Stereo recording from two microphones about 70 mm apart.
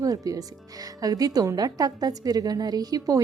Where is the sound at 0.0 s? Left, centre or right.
Right.